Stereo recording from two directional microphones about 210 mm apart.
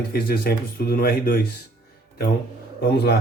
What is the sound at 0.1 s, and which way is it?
Speech, 45° left (ahead or behind).